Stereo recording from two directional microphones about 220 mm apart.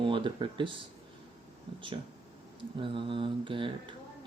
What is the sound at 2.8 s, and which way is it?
Speech, 25° right (ahead or behind).